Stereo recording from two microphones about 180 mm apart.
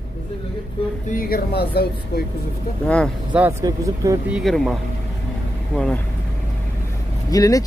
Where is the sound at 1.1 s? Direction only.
60° left (ahead or behind).